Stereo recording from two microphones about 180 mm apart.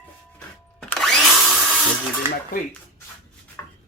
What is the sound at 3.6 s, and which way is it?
Chopping, 15° left (ahead or behind).